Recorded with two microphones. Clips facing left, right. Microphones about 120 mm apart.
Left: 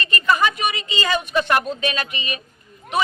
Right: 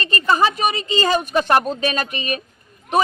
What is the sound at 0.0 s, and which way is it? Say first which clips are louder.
A woman's voice: right 2 dB; 30° right (ahead or behind).